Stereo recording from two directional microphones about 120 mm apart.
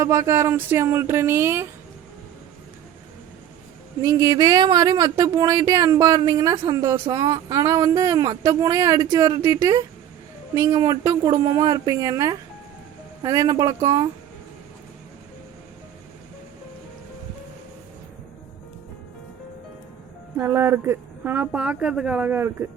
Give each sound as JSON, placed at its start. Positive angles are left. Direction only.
{"t": 0.0, "sound": "speech", "side_deg": -25}
{"t": 4.0, "sound": "speech", "side_deg": -30}
{"t": 7.0, "sound": "speech", "side_deg": -40}
{"t": 20.4, "sound": "speech", "side_deg": -20}